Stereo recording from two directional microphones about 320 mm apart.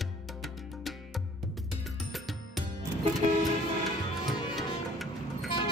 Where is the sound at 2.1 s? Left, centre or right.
Centre.